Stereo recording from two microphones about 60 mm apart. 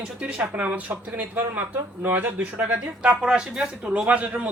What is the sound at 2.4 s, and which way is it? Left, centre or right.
Speech, right.